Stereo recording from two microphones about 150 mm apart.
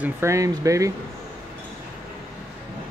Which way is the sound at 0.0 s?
20° right (ahead or behind).